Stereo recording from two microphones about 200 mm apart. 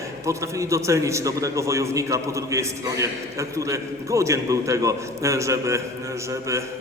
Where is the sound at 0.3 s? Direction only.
15° right (ahead or behind).